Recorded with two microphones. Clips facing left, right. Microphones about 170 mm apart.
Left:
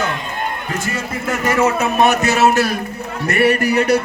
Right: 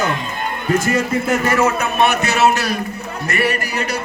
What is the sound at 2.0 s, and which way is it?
A man's voice, 45° left (ahead or behind).